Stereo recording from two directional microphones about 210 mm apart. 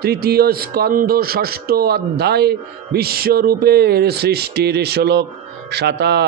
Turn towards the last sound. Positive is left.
turn(degrees=-50)  # may be behind; listen again after turning